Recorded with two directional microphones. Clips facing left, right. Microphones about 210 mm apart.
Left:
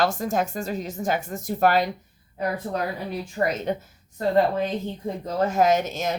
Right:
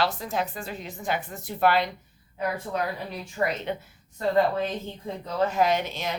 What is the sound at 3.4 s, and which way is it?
Speech, 35° left (ahead or behind).